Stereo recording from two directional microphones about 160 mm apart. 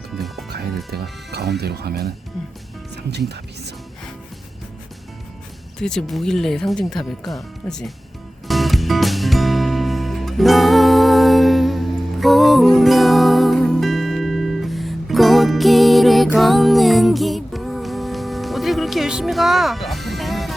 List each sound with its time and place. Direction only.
0.1 s music: centre (ahead or behind)
1.3 s speech: 90° right
2.9 s speech: 90° right
5.8 s speech: 5° left (ahead or behind)
8.4 s music: centre (ahead or behind)